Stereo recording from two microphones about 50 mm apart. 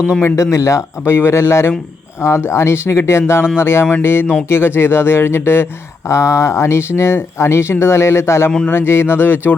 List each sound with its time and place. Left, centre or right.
0.3 s a man's voice: left
1.0 s speech: left
6.1 s speech: left
8.6 s speech: left